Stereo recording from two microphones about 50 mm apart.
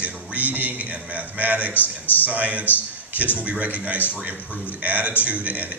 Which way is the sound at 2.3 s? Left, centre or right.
Right.